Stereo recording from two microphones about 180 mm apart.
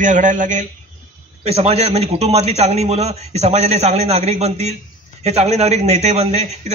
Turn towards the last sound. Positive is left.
turn(degrees=-40)  # may be behind; listen again after turning